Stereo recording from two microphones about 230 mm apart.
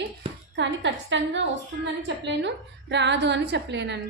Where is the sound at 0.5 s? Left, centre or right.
Right.